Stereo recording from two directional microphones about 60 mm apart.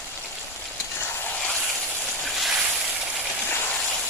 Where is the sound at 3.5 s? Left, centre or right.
Left.